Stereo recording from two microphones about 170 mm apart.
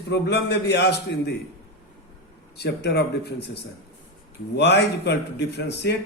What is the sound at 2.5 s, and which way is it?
A man's voice, 75° left (ahead or behind).